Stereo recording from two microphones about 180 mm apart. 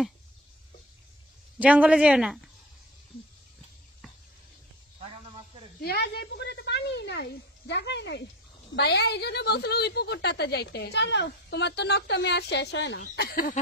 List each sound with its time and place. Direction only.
1.6 s speech: 10° right (ahead or behind)
5.8 s a sound: 65° left (ahead or behind)
8.7 s a woman's voice: 65° left (ahead or behind)
13.1 s speech: 60° left (ahead or behind)